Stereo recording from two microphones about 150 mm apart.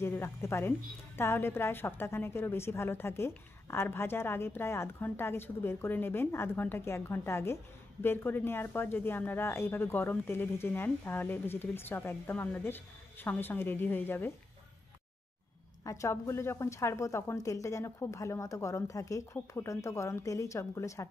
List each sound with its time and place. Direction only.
0.0 s a woman's voice: 15° left (ahead or behind)
15.8 s speech: 20° left (ahead or behind)